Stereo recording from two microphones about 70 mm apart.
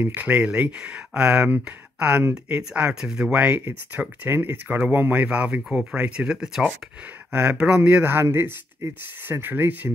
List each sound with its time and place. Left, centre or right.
0.0 s speech: right
5.6 s speech: centre; by 9.9 s right